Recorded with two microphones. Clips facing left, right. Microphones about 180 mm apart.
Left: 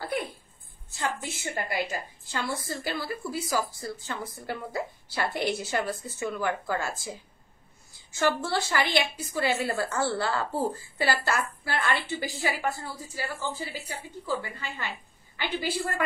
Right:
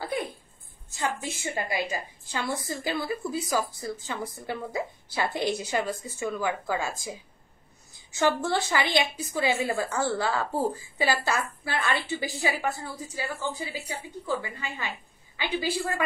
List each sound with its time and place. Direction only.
0.9 s a woman's voice: 15° right (ahead or behind)